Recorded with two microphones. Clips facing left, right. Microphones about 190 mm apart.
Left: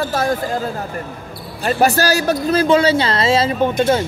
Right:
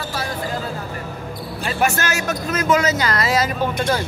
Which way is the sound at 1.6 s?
35° left (ahead or behind).